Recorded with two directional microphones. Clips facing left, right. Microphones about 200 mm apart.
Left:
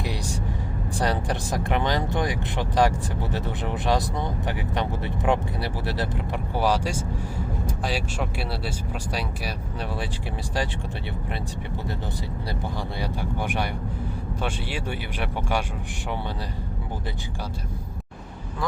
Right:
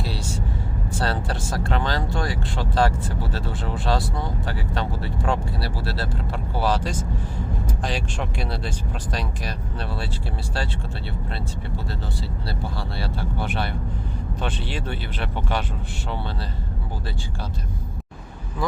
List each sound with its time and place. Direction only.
0.0 s vehicle: 15° left (ahead or behind)
0.9 s speech: 15° left (ahead or behind)
12.5 s speech: 15° left (ahead or behind)